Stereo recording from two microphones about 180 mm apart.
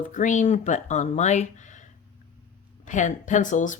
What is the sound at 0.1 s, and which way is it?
Speech, 45° left (ahead or behind).